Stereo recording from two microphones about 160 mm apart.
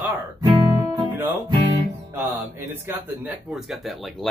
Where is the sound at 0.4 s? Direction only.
30° right (ahead or behind).